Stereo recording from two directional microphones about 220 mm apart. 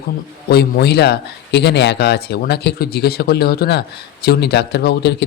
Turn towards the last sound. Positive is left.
turn(degrees=50)  # may be behind; listen again after turning